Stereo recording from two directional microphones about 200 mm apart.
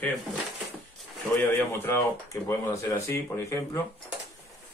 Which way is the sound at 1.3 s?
10° left (ahead or behind).